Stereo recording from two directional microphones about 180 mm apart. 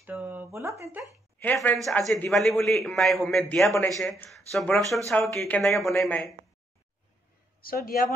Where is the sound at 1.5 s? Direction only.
10° left (ahead or behind).